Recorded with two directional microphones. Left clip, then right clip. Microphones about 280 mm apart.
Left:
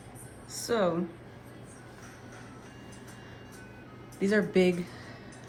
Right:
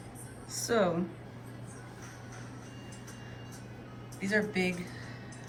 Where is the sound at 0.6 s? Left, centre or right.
Centre.